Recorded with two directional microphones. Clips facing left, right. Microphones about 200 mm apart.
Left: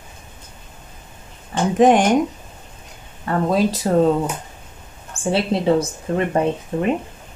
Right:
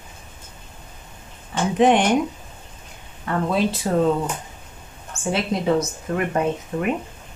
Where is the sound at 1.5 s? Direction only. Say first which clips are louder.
Left 3 dB; 45° left (ahead or behind).